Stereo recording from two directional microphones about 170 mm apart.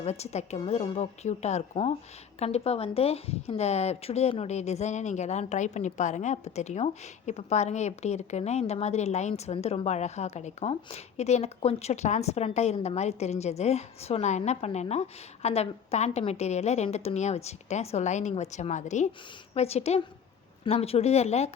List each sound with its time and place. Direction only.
0.0 s a woman's voice: 40° left (ahead or behind)